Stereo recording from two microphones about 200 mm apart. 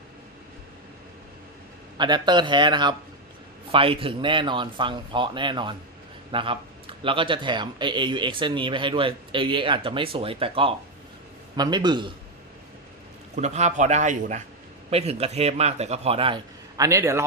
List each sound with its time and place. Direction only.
2.0 s speech: 20° right (ahead or behind)
13.3 s a man's voice: 35° right (ahead or behind); by 17.2 s 15° right (ahead or behind)